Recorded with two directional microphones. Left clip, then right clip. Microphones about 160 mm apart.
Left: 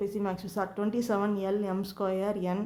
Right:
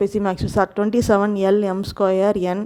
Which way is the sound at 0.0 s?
55° right (ahead or behind).